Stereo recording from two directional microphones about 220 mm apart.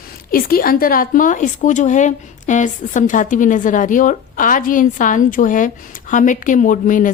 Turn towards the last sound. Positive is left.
turn(degrees=35)  # may be behind; listen again after turning